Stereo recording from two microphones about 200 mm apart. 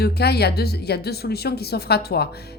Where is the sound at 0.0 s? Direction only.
55° left (ahead or behind).